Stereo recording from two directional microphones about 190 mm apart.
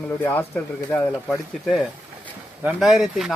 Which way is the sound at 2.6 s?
Centre (ahead or behind).